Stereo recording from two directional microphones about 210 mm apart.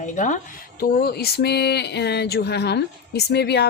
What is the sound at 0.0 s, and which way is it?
Speech, 35° left (ahead or behind).